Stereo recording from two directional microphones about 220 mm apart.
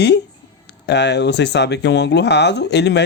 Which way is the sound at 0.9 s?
50° left (ahead or behind).